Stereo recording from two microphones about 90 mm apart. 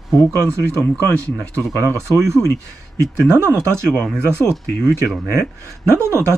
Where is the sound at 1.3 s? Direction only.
40° right (ahead or behind).